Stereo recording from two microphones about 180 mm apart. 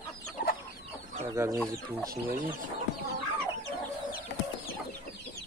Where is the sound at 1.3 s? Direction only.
15° right (ahead or behind).